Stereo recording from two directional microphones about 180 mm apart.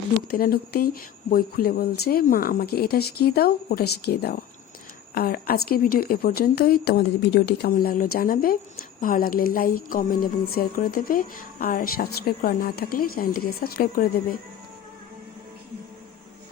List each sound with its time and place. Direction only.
0.3 s speech: 55° left (ahead or behind)